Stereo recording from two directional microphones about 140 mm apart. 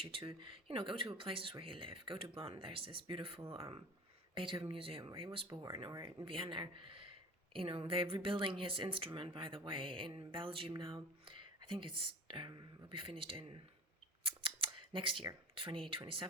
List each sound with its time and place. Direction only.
0.0 s speech: 40° right (ahead or behind)
14.3 s scissors: 40° right (ahead or behind)
15.5 s speech: 40° right (ahead or behind)